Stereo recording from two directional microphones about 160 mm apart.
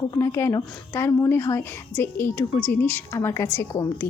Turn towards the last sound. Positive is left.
turn(degrees=20)  # may be behind; listen again after turning